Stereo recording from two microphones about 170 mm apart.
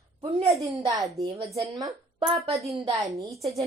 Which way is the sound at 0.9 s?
20° right (ahead or behind).